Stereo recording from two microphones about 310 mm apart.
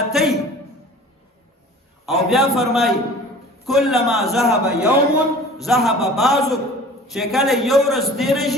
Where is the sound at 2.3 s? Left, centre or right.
Centre.